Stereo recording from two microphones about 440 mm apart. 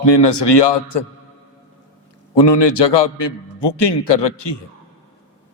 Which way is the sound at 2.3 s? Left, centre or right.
Left.